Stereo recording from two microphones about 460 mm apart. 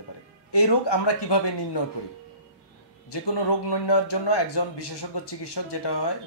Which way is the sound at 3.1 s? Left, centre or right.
Left.